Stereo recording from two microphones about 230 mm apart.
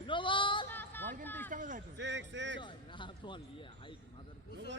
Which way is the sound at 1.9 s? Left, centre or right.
Right.